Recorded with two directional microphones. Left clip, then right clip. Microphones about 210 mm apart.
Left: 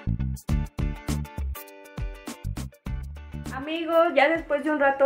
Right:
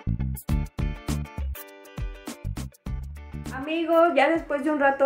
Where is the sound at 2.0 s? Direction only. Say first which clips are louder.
Even; centre (ahead or behind).